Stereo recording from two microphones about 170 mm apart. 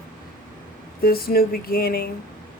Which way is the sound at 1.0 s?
60° left (ahead or behind).